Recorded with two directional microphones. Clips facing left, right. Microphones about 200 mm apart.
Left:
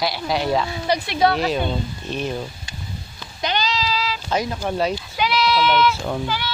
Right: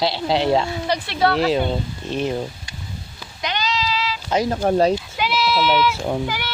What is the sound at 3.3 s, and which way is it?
Sheep, 35° left (ahead or behind).